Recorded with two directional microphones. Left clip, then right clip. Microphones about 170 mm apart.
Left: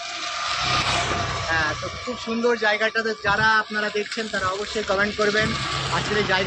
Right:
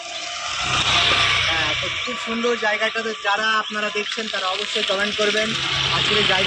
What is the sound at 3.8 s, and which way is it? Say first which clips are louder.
Speech: right 1 dB; 20° left (ahead or behind).